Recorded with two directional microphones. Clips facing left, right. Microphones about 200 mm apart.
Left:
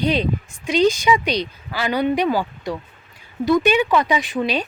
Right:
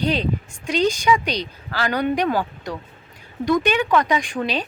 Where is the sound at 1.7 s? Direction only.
10° left (ahead or behind).